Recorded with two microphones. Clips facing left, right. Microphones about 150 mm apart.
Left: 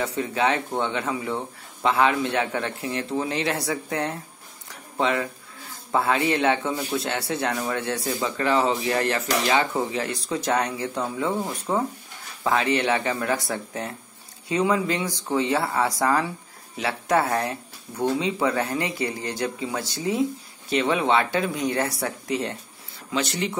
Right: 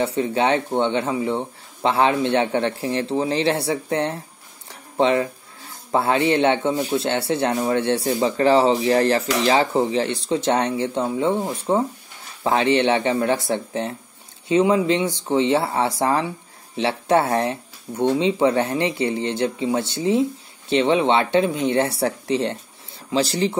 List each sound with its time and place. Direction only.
0.0 s speech: 25° right (ahead or behind)
4.6 s a sound: 30° right (ahead or behind)
5.9 s speech: 30° right (ahead or behind)